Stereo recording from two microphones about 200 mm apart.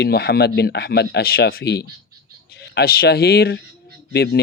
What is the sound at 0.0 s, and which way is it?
Speech, 55° left (ahead or behind).